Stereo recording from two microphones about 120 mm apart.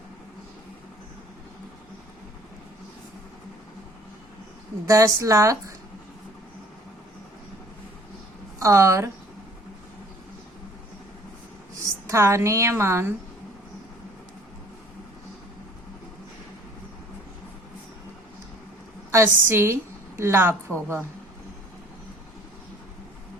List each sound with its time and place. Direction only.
4.9 s a woman's voice: 30° right (ahead or behind)
8.5 s a woman's voice: 25° right (ahead or behind)
11.7 s a woman's voice: 25° right (ahead or behind)
19.1 s a woman's voice: 20° right (ahead or behind)